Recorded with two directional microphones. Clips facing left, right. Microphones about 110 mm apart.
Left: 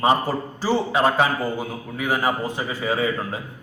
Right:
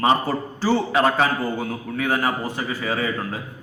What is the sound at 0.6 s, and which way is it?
A man's voice, 15° left (ahead or behind).